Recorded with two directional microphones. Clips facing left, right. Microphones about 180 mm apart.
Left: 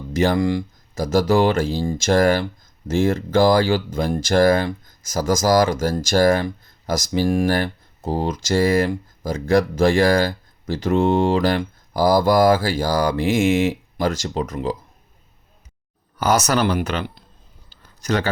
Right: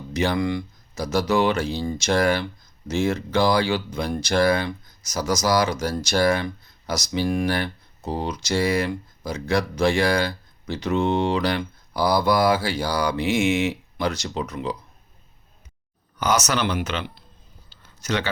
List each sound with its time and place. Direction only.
0.1 s speech: 45° left (ahead or behind)
16.2 s speech: 40° left (ahead or behind)
17.8 s a sound: 40° left (ahead or behind)